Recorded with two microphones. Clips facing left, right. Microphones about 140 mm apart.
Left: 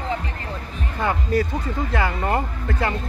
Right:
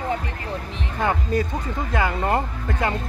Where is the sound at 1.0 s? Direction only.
20° right (ahead or behind).